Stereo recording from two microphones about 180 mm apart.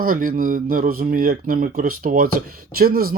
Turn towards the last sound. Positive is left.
turn(degrees=-55)  # may be behind; listen again after turning